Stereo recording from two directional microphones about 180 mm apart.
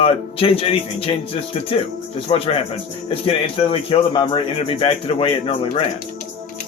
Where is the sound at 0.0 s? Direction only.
30° left (ahead or behind).